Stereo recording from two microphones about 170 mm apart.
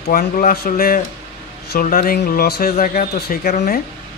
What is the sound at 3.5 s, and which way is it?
Speech, 50° left (ahead or behind).